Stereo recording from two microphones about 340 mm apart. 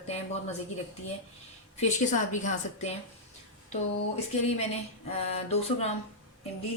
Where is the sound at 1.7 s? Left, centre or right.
Left.